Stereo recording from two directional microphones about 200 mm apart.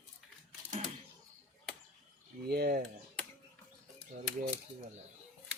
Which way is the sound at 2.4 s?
50° right (ahead or behind).